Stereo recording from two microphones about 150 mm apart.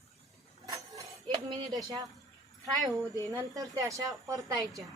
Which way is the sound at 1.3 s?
30° right (ahead or behind).